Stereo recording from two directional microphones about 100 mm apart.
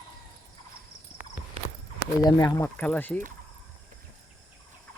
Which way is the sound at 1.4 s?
15° right (ahead or behind).